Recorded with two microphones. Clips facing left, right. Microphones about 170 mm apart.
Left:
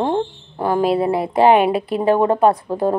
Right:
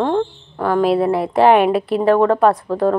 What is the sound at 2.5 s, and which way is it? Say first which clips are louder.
Speech: right 1 dB; 20° left (ahead or behind).